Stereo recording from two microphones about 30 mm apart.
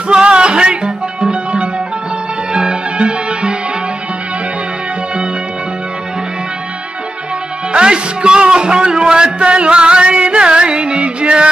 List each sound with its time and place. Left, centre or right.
0.1 s music: right
7.7 s music: right